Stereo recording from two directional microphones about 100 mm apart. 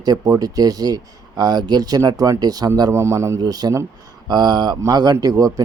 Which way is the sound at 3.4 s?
40° right (ahead or behind).